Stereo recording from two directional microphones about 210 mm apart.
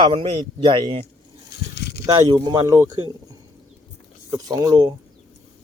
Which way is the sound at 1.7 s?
55° left (ahead or behind).